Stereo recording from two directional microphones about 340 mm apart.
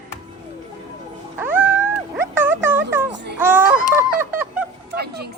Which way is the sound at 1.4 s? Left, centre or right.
Centre.